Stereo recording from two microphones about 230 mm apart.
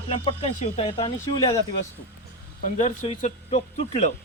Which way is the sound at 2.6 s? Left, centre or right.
Left.